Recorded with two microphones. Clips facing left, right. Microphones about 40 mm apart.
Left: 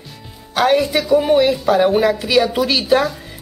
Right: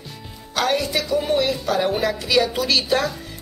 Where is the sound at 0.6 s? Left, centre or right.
Centre.